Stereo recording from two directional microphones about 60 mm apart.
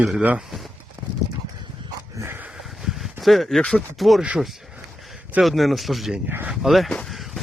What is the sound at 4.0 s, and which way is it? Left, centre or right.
Speech, centre.